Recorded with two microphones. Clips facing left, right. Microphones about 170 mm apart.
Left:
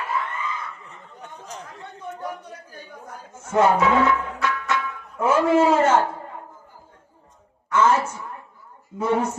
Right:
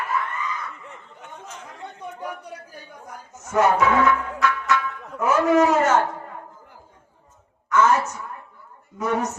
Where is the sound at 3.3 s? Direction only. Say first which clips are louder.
Left 1 dB; 30° left (ahead or behind).